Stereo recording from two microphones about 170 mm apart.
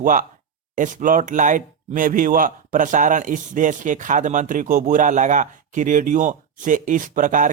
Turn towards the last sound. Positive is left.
turn(degrees=-50)  # may be behind; listen again after turning